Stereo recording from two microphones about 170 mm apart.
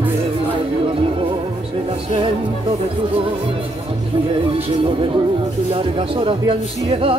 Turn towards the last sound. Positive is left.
turn(degrees=-35)  # may be behind; listen again after turning